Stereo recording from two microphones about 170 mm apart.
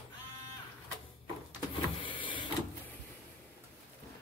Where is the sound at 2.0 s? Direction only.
30° left (ahead or behind).